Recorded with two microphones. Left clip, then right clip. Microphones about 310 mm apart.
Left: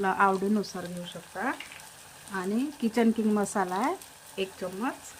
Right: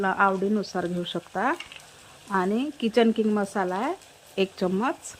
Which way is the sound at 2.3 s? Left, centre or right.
Centre.